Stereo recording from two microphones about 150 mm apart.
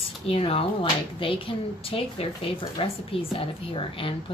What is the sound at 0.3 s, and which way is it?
Speech, 40° left (ahead or behind).